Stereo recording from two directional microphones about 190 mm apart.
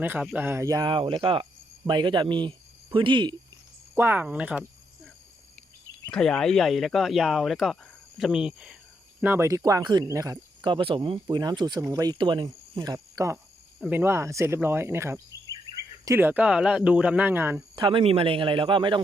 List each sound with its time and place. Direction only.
0.0 s speech: 10° right (ahead or behind); by 1.5 s 25° right (ahead or behind)
1.9 s cricket: 25° right (ahead or behind)
3.9 s speech: 10° right (ahead or behind)
6.1 s speech: 5° left (ahead or behind); by 13.4 s 15° right (ahead or behind)
13.7 s speech: centre (ahead or behind)
14.0 s speech: 15° right (ahead or behind)
17.7 s speech: 25° right (ahead or behind)